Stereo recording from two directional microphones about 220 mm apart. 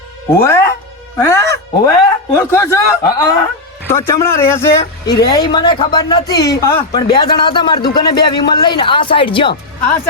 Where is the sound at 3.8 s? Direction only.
10° left (ahead or behind).